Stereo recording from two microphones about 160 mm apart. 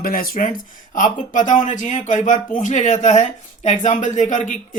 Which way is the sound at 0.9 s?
50° left (ahead or behind).